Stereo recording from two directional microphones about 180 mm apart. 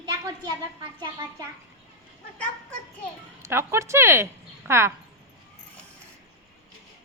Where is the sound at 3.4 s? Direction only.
15° right (ahead or behind).